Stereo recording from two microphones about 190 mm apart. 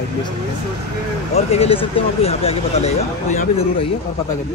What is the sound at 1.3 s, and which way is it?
Speech, 35° left (ahead or behind).